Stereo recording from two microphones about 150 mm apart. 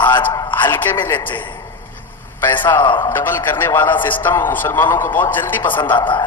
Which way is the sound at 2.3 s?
15° left (ahead or behind).